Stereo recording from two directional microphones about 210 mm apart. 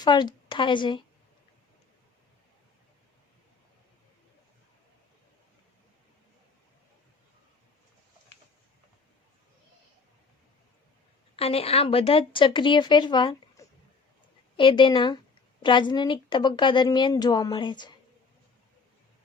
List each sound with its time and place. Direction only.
0.0 s a woman's voice: 20° left (ahead or behind)
11.3 s speech: 30° left (ahead or behind)